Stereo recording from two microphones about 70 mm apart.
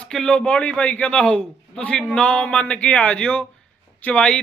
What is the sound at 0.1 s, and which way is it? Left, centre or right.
A man's voice, centre.